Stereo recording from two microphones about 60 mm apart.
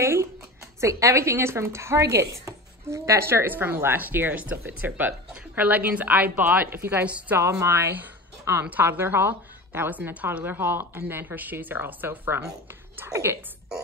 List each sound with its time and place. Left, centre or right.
0.0 s speech: right
0.7 s a woman's voice: right
7.1 s a woman's voice: right
7.7 s a woman's voice: right
13.1 s a woman's voice: right